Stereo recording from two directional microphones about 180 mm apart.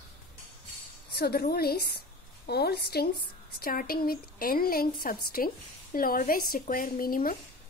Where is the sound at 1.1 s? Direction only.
60° left (ahead or behind).